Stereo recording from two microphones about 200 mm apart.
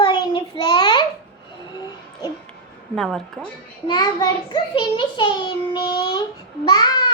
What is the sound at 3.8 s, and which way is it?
A child's voice, 20° left (ahead or behind).